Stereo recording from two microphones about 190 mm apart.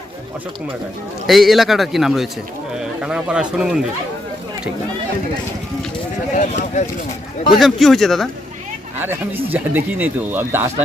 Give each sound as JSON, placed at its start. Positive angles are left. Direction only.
{"t": 1.3, "sound": "a man's voice", "side_deg": 0}
{"t": 6.3, "sound": "speech", "side_deg": 40}
{"t": 7.6, "sound": "a man's voice", "side_deg": 0}
{"t": 9.0, "sound": "speech", "side_deg": -10}